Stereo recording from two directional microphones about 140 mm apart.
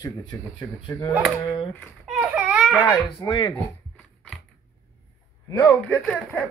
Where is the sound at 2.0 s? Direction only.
10° right (ahead or behind).